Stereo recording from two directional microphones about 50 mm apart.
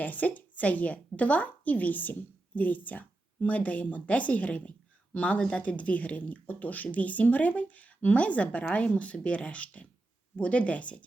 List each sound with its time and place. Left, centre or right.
0.0 s a woman's voice: left